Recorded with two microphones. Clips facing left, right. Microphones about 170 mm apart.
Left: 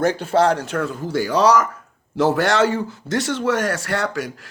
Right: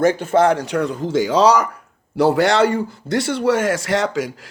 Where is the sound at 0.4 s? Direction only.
15° right (ahead or behind).